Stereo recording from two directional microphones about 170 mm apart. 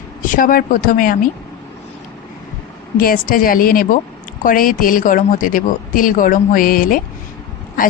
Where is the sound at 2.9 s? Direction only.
60° left (ahead or behind).